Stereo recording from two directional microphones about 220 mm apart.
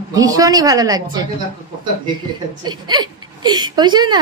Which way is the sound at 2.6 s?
20° right (ahead or behind).